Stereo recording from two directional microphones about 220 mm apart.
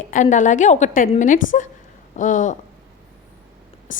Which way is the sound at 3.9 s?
35° left (ahead or behind).